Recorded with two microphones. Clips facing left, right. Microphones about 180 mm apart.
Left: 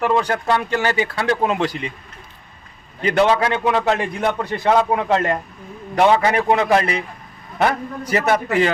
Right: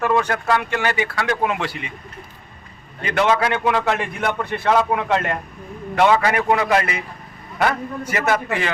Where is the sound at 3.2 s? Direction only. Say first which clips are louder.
Left 1 dB; 30° left (ahead or behind).